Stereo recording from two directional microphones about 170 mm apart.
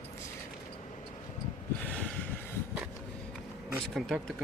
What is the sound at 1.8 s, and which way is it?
Snort, 5° left (ahead or behind).